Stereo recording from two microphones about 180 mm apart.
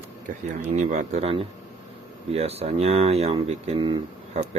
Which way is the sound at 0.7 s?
40° right (ahead or behind).